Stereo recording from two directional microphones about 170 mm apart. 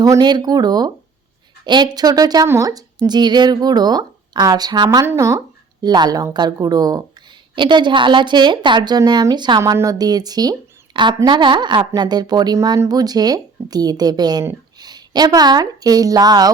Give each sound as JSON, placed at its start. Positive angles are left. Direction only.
{"t": 0.0, "sound": "speech", "side_deg": -20}